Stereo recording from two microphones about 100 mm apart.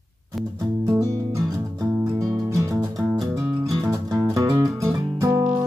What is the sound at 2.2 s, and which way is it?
Music, 30° right (ahead or behind).